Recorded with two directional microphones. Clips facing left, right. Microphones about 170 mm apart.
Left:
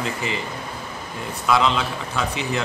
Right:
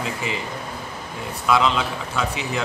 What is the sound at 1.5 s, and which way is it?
Speech, centre (ahead or behind).